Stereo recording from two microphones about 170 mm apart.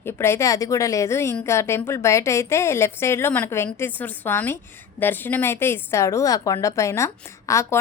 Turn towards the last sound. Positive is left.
turn(degrees=15)  # may be behind; listen again after turning